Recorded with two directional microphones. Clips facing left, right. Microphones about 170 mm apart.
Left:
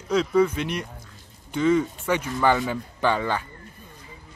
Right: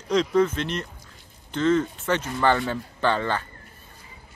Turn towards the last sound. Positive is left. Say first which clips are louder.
# even
turn(degrees=10)  # may be behind; listen again after turning